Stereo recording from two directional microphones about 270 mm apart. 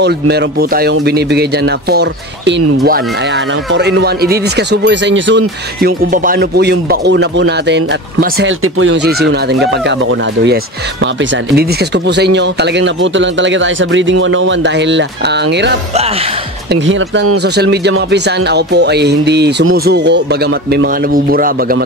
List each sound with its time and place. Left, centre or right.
0.0 s speech: right
12.2 s a man's voice: right